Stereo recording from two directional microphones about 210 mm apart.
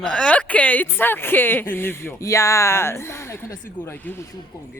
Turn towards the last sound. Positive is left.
turn(degrees=10)  # may be behind; listen again after turning